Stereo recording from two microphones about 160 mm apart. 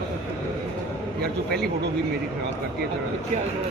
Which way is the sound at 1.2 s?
80° right.